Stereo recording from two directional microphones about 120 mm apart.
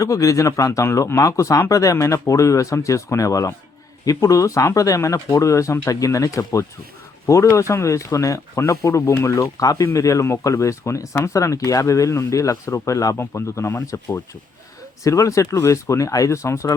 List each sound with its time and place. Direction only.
0.0 s speech: 30° left (ahead or behind)